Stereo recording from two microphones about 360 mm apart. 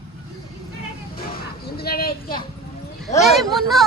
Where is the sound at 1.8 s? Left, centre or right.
Left.